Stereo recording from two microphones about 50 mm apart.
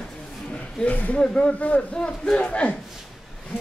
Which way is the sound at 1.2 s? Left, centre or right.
Centre.